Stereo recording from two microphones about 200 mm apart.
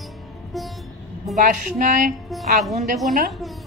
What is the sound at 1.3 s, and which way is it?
Speech, 40° right (ahead or behind).